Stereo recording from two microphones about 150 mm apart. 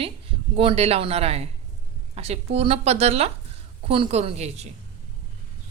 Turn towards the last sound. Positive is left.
turn(degrees=-45)  # may be behind; listen again after turning